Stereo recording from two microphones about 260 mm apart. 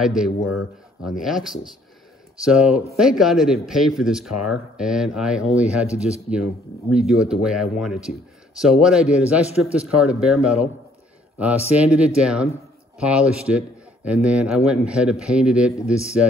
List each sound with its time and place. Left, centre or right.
0.0 s speech: centre
0.4 s speech: left
1.0 s speech: centre
11.7 s speech: centre